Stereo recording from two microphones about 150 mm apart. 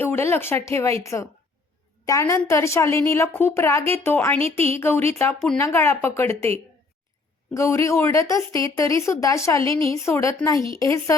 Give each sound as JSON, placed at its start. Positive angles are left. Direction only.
{"t": 0.0, "sound": "a woman's voice", "side_deg": 15}
{"t": 7.5, "sound": "a woman's voice", "side_deg": 20}